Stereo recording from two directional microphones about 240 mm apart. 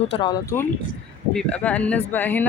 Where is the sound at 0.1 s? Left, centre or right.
Centre.